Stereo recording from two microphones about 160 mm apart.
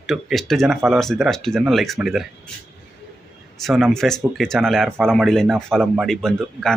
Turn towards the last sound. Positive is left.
turn(degrees=5)  # may be behind; listen again after turning